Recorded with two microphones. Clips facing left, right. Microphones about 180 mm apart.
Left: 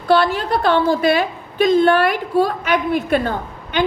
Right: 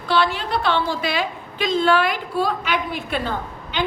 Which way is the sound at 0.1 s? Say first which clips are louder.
Left 5 dB; 50° left (ahead or behind).